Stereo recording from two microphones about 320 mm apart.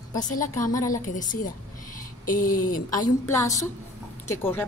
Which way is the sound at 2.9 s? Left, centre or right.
Centre.